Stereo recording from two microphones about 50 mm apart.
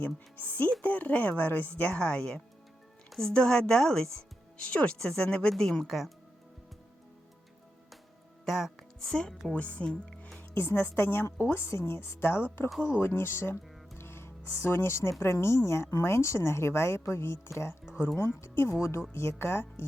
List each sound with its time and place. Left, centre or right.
0.0 s a woman's voice: left
3.1 s speech: centre
5.8 s speech: centre
8.4 s speech: centre
9.5 s speech: left
9.9 s music: left
10.5 s a woman's voice: left
11.5 s a woman's voice: left
14.0 s music: left
15.2 s a woman's voice: left
18.2 s speech: left